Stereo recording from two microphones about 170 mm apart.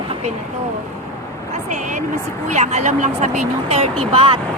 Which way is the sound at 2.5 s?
45° right (ahead or behind).